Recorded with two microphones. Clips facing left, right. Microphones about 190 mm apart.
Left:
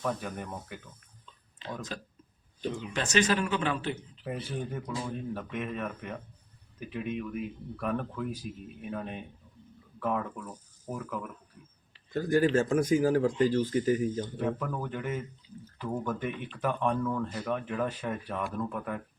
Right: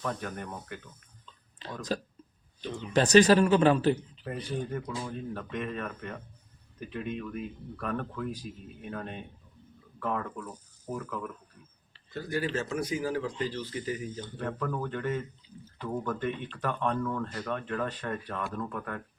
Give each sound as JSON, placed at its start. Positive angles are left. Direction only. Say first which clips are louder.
{"t": 0.0, "sound": "speech", "louder": "left 1 dB", "side_deg": 5}
{"t": 1.6, "sound": "a sound", "louder": "left 2 dB", "side_deg": -40}
{"t": 2.9, "sound": "speech", "louder": "right 8 dB", "side_deg": -40}
{"t": 4.2, "sound": "speech", "louder": "right 1 dB", "side_deg": 5}
{"t": 12.1, "sound": "speech", "louder": "left 7 dB", "side_deg": 45}
{"t": 14.3, "sound": "speech", "louder": "left 1 dB", "side_deg": 10}